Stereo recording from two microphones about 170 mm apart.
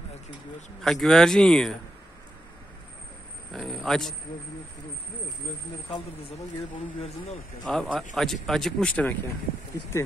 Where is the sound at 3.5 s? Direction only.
Centre (ahead or behind).